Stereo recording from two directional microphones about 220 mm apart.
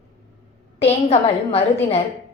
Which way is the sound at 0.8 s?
25° left (ahead or behind).